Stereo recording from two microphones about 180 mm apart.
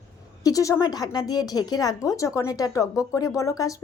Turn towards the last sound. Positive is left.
turn(degrees=20)  # may be behind; listen again after turning